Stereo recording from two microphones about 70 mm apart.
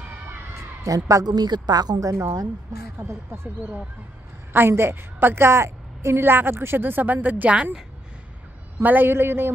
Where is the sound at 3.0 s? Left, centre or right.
Right.